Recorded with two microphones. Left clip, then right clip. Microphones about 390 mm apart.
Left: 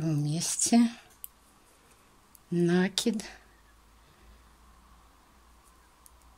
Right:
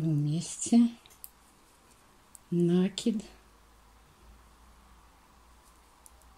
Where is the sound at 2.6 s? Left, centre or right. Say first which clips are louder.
Left 2 dB; left.